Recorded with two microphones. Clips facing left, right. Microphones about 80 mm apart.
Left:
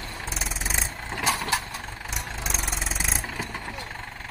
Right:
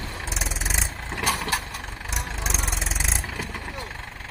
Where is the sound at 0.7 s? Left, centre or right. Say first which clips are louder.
Even; centre.